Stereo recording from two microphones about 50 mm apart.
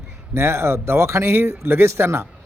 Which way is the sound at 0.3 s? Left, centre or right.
Right.